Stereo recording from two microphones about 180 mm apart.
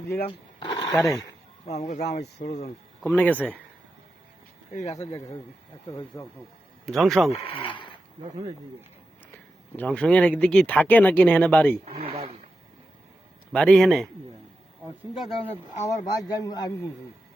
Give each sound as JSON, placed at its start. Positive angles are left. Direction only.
{"t": 0.3, "sound": "speech", "side_deg": 25}
{"t": 2.0, "sound": "speech", "side_deg": 60}
{"t": 3.0, "sound": "speech", "side_deg": 10}
{"t": 4.7, "sound": "speech", "side_deg": 40}
{"t": 5.9, "sound": "speech", "side_deg": 20}
{"t": 6.8, "sound": "a man's voice", "side_deg": 0}
{"t": 7.3, "sound": "speech", "side_deg": 30}
{"t": 9.7, "sound": "speech", "side_deg": 5}
{"t": 11.9, "sound": "a sound", "side_deg": -35}
{"t": 13.5, "sound": "a man's voice", "side_deg": 5}
{"t": 15.1, "sound": "a man's voice", "side_deg": 0}
{"t": 15.8, "sound": "speech", "side_deg": 20}